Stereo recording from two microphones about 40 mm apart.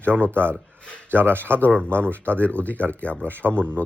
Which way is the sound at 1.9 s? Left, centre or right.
Right.